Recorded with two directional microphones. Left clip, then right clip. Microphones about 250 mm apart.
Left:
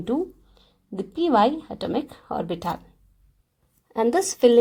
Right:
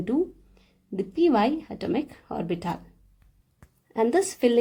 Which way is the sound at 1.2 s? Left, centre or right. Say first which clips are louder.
Left 3 dB; centre.